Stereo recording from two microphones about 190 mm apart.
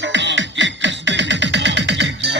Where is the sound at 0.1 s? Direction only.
70° right (ahead or behind).